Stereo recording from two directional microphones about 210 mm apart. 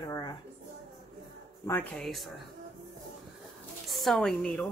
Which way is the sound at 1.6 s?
5° left (ahead or behind).